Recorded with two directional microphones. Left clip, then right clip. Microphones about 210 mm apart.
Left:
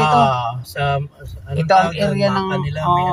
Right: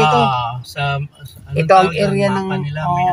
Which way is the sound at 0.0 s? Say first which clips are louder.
Right 1 dB; 50° left (ahead or behind).